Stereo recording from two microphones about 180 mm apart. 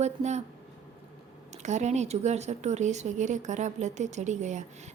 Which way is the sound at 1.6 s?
40° right (ahead or behind).